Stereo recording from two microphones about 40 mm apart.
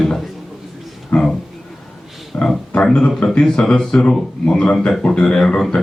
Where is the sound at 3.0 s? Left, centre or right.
Left.